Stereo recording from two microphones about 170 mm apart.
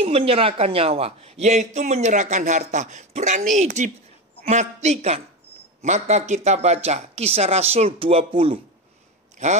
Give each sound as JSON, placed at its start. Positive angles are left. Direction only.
{"t": 0.0, "sound": "speech", "side_deg": -35}